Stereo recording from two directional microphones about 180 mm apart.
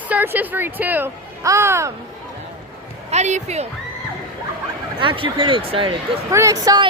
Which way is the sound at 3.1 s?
40° right (ahead or behind).